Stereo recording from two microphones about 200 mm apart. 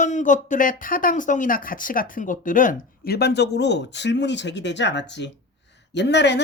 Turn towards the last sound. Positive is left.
turn(degrees=60)  # may be behind; listen again after turning